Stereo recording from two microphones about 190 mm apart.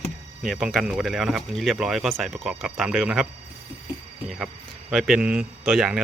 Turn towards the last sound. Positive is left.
turn(degrees=0)  # may be behind; listen again after turning